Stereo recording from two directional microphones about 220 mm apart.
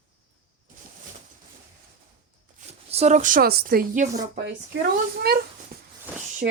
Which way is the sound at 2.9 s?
30° right (ahead or behind).